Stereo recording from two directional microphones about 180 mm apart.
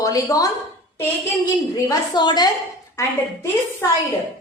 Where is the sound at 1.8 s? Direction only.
25° left (ahead or behind).